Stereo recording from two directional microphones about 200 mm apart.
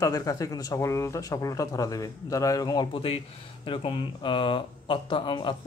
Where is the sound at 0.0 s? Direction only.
15° left (ahead or behind).